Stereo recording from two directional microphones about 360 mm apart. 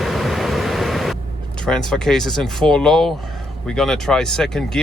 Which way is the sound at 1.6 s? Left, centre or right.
Centre.